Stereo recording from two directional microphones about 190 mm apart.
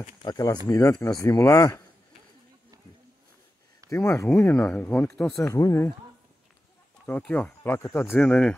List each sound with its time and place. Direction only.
0.0 s speech: 20° left (ahead or behind)
3.9 s speech: 15° left (ahead or behind)
5.3 s speech: 15° left (ahead or behind)
7.1 s speech: 10° left (ahead or behind)